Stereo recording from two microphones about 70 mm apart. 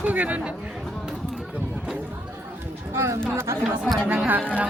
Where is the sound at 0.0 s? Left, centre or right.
Right.